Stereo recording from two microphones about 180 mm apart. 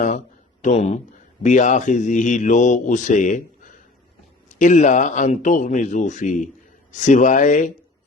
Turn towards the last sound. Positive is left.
turn(degrees=45)  # may be behind; listen again after turning